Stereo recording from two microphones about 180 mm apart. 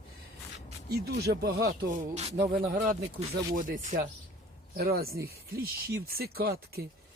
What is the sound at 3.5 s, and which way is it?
Speech, 50° right (ahead or behind).